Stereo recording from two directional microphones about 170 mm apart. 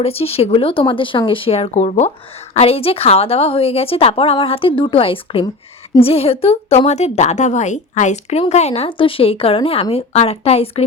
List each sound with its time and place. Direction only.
0.0 s a woman's voice: 35° left (ahead or behind)